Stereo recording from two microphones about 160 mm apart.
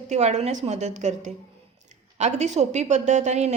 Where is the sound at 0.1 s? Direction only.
45° right (ahead or behind).